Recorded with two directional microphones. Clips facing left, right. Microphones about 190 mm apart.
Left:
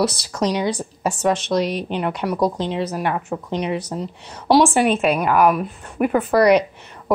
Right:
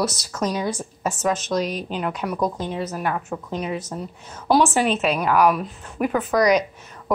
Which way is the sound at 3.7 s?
35° left (ahead or behind).